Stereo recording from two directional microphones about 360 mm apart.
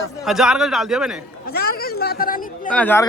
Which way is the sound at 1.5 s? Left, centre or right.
Left.